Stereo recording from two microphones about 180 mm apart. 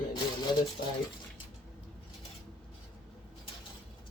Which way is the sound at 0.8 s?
50° left (ahead or behind).